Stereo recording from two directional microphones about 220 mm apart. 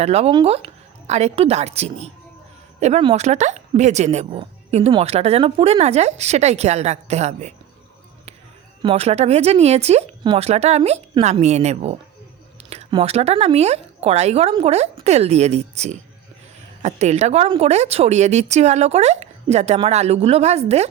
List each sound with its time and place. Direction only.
0.0 s speech: 25° right (ahead or behind)
8.8 s speech: 25° right (ahead or behind)